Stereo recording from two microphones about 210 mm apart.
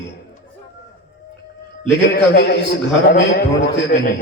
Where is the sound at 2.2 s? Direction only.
50° left (ahead or behind).